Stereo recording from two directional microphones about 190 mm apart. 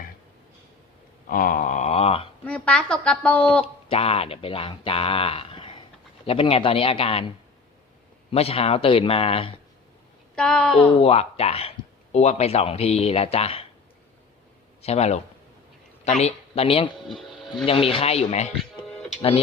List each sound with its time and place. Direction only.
1.3 s a sound: 45° left (ahead or behind); by 2.3 s 30° left (ahead or behind)
2.4 s a woman's voice: 5° left (ahead or behind)
3.6 s a sound: 30° left (ahead or behind)
6.2 s speech: 30° left (ahead or behind)
10.3 s speech: 5° left (ahead or behind)
10.9 s speech: 30° left (ahead or behind)
14.8 s speech: 35° left (ahead or behind)
16.2 s speech: 30° left (ahead or behind)
17.1 s speech: centre (ahead or behind)
17.7 s speech: 30° left (ahead or behind)